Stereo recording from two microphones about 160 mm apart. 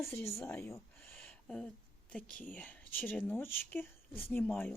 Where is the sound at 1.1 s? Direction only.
5° left (ahead or behind).